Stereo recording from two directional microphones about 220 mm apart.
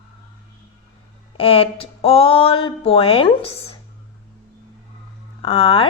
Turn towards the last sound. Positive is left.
turn(degrees=25)  # may be behind; listen again after turning